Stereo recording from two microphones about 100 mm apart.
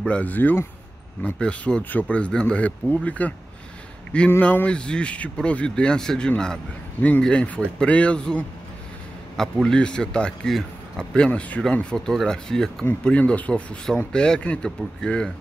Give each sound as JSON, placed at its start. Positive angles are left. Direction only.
{"t": 0.0, "sound": "speech", "side_deg": 15}
{"t": 4.4, "sound": "speech", "side_deg": 15}
{"t": 12.8, "sound": "speech", "side_deg": 15}